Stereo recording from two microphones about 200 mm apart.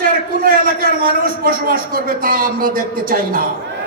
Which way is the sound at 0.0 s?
45° right (ahead or behind).